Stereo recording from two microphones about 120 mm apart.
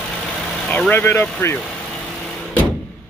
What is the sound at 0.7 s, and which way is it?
Speech, 15° left (ahead or behind).